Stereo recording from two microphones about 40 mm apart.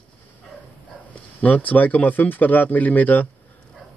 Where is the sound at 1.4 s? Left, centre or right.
Left.